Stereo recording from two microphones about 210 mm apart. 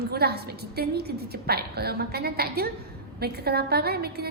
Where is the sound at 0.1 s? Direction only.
50° right (ahead or behind).